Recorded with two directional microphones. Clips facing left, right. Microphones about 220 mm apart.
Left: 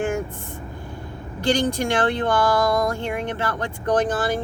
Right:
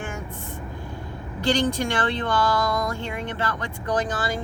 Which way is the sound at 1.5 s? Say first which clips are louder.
Left 2 dB; 50° left (ahead or behind).